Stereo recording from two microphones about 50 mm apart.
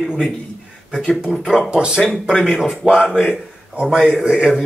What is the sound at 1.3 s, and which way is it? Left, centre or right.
Speech, centre.